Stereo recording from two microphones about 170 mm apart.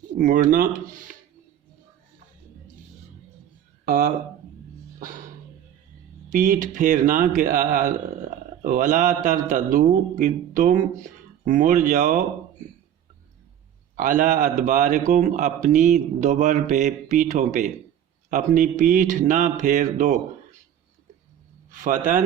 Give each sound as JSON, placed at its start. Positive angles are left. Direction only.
{"t": 0.2, "sound": "a man's voice", "side_deg": -55}
{"t": 3.8, "sound": "speech", "side_deg": -60}
{"t": 6.3, "sound": "a man's voice", "side_deg": -50}
{"t": 13.9, "sound": "a man's voice", "side_deg": -50}
{"t": 21.7, "sound": "a man's voice", "side_deg": -50}